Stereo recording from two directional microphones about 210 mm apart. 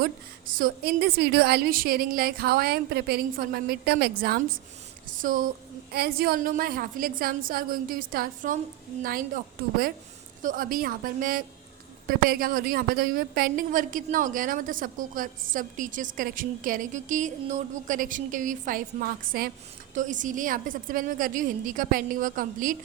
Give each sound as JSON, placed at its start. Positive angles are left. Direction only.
{"t": 0.0, "sound": "a woman's voice", "side_deg": -40}